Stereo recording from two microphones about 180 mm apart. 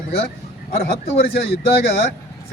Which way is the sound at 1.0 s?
35° left (ahead or behind).